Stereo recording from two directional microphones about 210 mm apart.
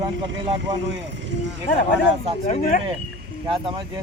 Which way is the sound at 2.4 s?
40° left (ahead or behind).